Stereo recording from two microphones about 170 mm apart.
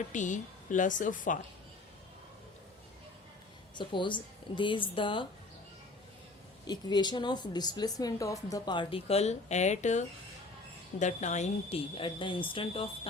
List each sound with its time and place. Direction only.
0.1 s a woman's voice: 45° left (ahead or behind)
3.8 s speech: 30° left (ahead or behind)
6.7 s a woman's voice: 25° left (ahead or behind)